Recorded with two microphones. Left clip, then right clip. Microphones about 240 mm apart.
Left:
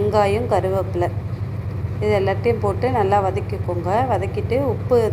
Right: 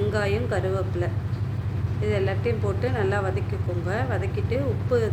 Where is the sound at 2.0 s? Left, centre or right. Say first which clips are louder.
Left 8 dB; centre.